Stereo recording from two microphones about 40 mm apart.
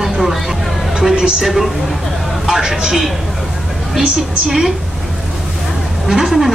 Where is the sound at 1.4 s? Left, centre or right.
Centre.